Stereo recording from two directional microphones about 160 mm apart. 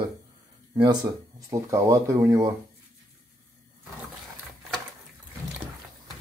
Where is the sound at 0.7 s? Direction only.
30° right (ahead or behind).